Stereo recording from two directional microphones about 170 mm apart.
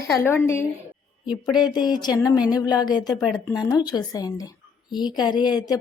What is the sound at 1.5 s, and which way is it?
A woman's voice, 25° left (ahead or behind).